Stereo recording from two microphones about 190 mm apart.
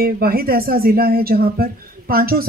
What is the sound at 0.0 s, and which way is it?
Speech, 50° right (ahead or behind).